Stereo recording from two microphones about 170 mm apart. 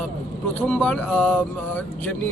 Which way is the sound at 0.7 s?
5° left (ahead or behind).